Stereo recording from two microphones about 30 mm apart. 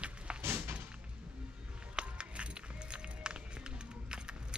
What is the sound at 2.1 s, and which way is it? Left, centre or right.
Music, right.